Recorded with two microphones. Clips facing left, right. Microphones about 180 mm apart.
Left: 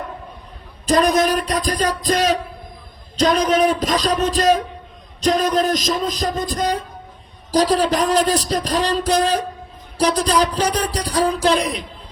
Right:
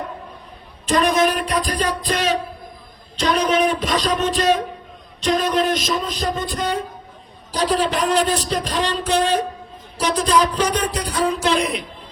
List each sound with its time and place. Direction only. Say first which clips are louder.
0.9 s speech: left 2 dB; 40° left (ahead or behind)